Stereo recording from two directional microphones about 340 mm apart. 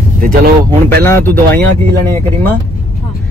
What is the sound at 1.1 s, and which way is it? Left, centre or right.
Speech, centre.